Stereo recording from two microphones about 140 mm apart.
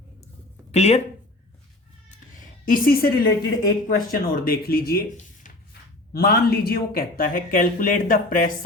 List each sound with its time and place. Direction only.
0.7 s speech: 50° left (ahead or behind)
2.0 s cat: 70° left (ahead or behind); by 3.3 s 90° left
3.8 s speech: 90° left
6.1 s speech: 90° left